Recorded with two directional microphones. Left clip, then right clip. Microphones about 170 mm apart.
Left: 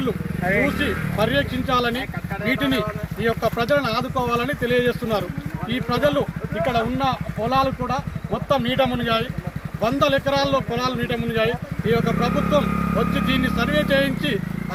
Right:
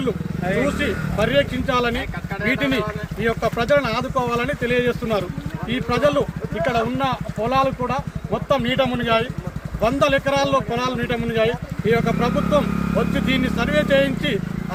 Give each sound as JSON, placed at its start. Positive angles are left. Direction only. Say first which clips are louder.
{"t": 0.4, "sound": "speech", "louder": "left 1 dB", "side_deg": 35}
{"t": 0.8, "sound": "speech", "louder": "even", "side_deg": 0}
{"t": 3.2, "sound": "speech", "louder": "even", "side_deg": 0}